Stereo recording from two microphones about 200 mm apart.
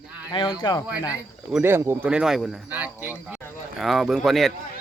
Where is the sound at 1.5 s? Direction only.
10° right (ahead or behind).